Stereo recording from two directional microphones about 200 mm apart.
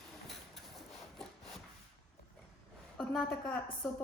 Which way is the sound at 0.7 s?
Centre (ahead or behind).